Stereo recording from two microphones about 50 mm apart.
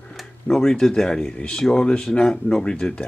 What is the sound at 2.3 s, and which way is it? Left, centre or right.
Speech, centre.